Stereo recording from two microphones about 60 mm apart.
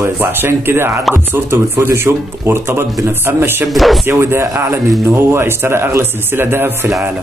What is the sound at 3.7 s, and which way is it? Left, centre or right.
Speech, centre.